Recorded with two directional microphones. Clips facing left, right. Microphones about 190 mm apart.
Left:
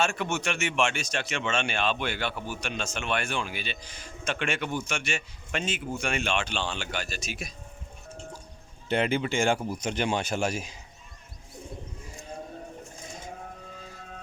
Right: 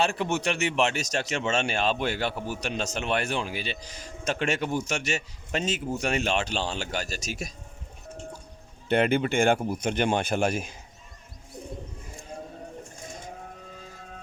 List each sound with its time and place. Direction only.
0.0 s speech: 35° right (ahead or behind)
8.9 s speech: 55° right (ahead or behind)